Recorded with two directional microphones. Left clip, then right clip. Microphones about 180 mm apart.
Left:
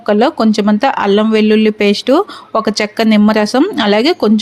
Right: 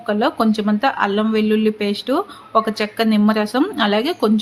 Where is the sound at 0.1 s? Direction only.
40° left (ahead or behind).